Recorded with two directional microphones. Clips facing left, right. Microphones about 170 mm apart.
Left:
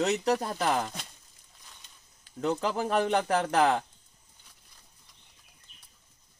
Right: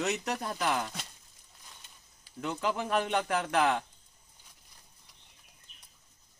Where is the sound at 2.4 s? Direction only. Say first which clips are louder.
Left 4 dB; 35° left (ahead or behind).